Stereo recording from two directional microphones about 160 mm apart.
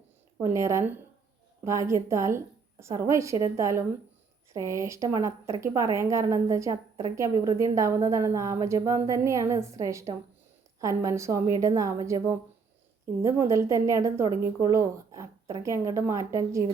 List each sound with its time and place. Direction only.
0.5 s a woman's voice: 20° right (ahead or behind)